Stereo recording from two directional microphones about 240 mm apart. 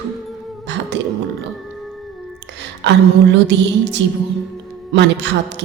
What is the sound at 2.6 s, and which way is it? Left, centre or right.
A woman's voice, right.